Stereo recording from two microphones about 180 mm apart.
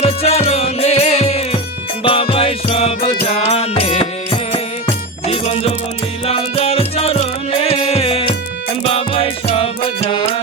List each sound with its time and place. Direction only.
0.0 s music: 35° left (ahead or behind)
5.2 s music: 35° left (ahead or behind)